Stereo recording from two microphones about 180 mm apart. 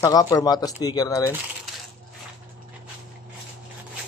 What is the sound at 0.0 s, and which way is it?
Speech, 20° left (ahead or behind).